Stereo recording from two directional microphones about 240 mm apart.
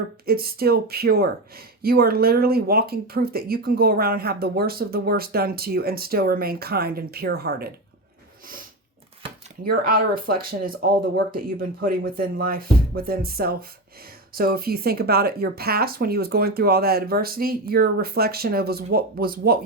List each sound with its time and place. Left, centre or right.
0.3 s speech: right
9.6 s speech: right